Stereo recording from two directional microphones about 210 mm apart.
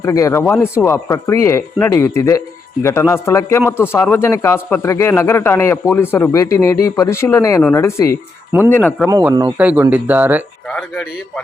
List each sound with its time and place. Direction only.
0.0 s speech: 15° left (ahead or behind)
9.0 s speech: 15° right (ahead or behind)
9.5 s speech: 5° right (ahead or behind)
10.7 s speech: 5° left (ahead or behind)